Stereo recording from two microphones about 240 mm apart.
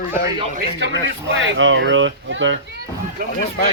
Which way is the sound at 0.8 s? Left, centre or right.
Right.